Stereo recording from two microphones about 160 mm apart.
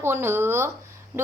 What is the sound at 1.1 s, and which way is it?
Speech, 15° right (ahead or behind).